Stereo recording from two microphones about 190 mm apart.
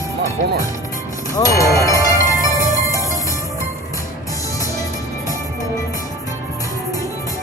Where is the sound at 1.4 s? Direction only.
15° left (ahead or behind).